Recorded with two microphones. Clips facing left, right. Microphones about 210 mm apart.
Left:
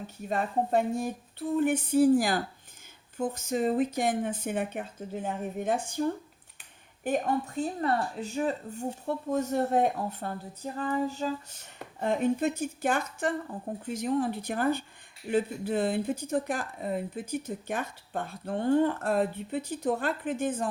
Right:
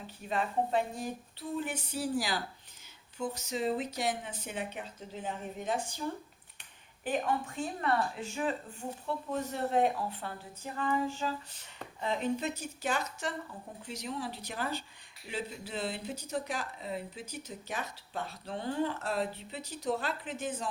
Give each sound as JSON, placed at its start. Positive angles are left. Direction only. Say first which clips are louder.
{"t": 0.3, "sound": "speech", "louder": "left 3 dB", "side_deg": 50}
{"t": 7.0, "sound": "speech", "louder": "left 4 dB", "side_deg": 45}
{"t": 11.9, "sound": "speech", "louder": "left 6 dB", "side_deg": 50}